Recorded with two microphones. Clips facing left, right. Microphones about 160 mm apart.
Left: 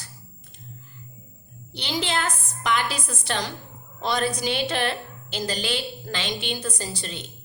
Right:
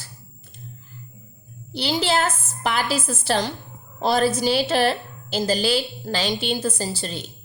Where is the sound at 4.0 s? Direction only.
35° right (ahead or behind).